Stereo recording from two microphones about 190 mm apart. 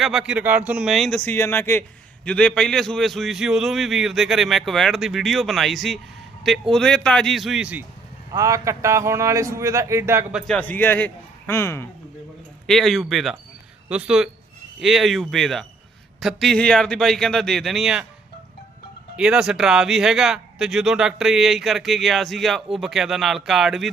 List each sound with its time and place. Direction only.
0.0 s speech: centre (ahead or behind)
8.3 s a man's voice: 15° right (ahead or behind)
10.4 s a man's voice: 5° left (ahead or behind)
12.6 s speech: centre (ahead or behind)
19.1 s speech: 5° right (ahead or behind)